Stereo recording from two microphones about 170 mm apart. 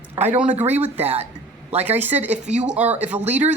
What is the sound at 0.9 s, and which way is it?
Speech, 35° right (ahead or behind).